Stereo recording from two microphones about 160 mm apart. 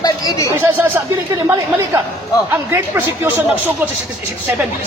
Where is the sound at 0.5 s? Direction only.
15° right (ahead or behind).